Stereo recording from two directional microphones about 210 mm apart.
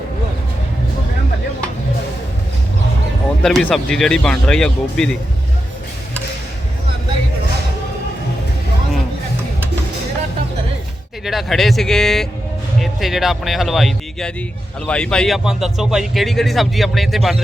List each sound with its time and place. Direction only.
3.4 s speech: 5° left (ahead or behind)
11.3 s speech: centre (ahead or behind)